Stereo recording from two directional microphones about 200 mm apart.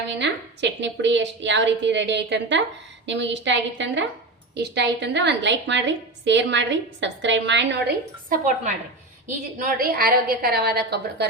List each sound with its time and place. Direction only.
0.2 s a woman's voice: 60° right (ahead or behind)
8.3 s a woman's voice: 40° right (ahead or behind)